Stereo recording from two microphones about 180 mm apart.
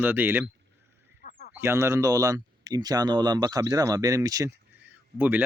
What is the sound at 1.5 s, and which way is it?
Speech, 15° right (ahead or behind).